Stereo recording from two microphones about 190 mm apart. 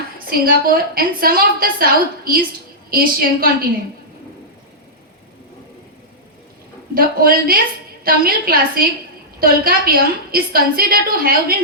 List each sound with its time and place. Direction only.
0.3 s a woman's voice: 50° right (ahead or behind)
6.9 s a woman's voice: 50° right (ahead or behind)